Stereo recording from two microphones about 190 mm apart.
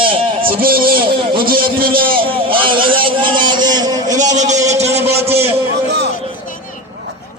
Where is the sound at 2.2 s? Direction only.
30° right (ahead or behind).